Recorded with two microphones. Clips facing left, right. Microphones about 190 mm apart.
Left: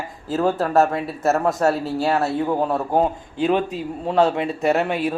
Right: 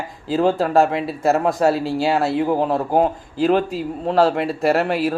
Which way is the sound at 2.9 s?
10° right (ahead or behind).